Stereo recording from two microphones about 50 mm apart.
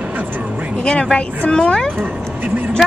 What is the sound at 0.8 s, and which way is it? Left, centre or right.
Speech, left.